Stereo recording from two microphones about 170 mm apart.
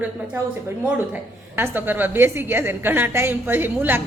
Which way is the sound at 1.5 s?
10° right (ahead or behind).